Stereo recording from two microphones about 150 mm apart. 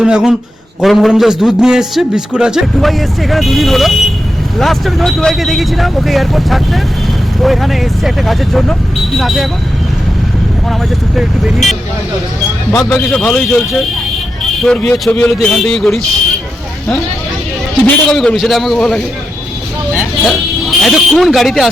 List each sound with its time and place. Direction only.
0.0 s a man's voice: 5° right (ahead or behind)
10.7 s a man's voice: 5° right (ahead or behind)
12.7 s a man's voice: 20° left (ahead or behind)
13.1 s a man's voice: 5° left (ahead or behind)
18.1 s a man's voice: centre (ahead or behind)